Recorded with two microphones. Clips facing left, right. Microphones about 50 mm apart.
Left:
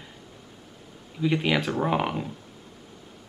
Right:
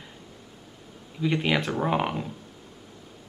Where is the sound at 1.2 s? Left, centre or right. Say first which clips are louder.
Left 1 dB; centre.